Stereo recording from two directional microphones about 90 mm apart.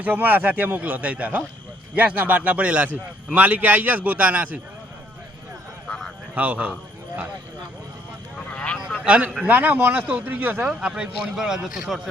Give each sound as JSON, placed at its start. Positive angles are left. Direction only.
{"t": 0.0, "sound": "a man's voice", "side_deg": -20}
{"t": 6.3, "sound": "a man's voice", "side_deg": -15}
{"t": 8.5, "sound": "a sound", "side_deg": 15}
{"t": 9.0, "sound": "a man's voice", "side_deg": -15}